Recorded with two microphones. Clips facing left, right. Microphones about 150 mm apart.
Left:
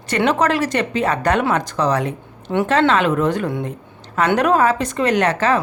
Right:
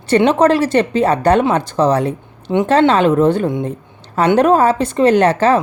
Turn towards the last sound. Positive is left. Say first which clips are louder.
# right 5 dB
turn(degrees=-30)  # may be behind; listen again after turning